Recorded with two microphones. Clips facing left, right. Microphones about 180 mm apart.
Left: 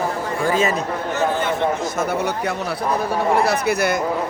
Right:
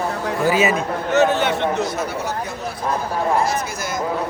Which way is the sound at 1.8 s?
50° left (ahead or behind).